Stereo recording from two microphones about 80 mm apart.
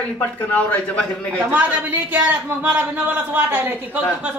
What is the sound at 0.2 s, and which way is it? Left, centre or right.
A man's voice, centre.